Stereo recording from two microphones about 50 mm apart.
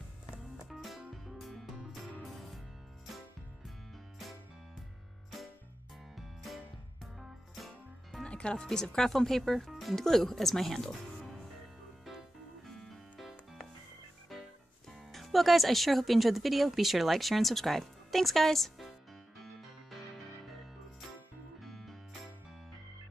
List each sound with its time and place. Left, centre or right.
0.7 s music: centre
6.1 s music: centre
8.2 s music: left
8.6 s speech: centre
12.6 s music: centre
14.9 s speech: centre
19.3 s music: centre